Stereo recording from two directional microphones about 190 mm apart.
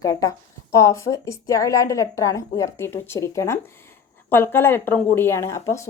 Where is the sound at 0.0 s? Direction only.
20° left (ahead or behind).